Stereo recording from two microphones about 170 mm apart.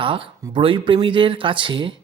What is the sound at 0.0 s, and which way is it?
Speech, 30° right (ahead or behind).